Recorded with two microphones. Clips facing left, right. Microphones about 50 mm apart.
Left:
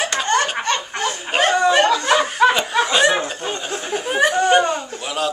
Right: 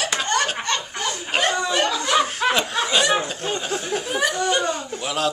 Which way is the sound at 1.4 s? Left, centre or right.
Left.